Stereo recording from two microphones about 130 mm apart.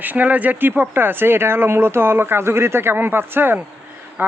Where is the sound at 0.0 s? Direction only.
15° right (ahead or behind).